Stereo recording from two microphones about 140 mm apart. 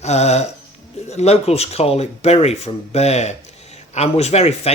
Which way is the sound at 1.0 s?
50° left (ahead or behind).